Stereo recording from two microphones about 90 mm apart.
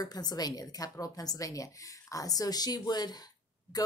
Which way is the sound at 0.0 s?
45° left (ahead or behind).